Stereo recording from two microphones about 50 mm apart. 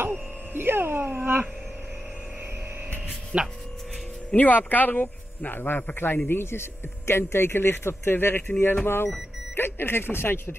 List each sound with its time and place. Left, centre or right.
0.0 s a sound: right
1.0 s dog: right
3.3 s speech: centre
4.4 s a man's voice: left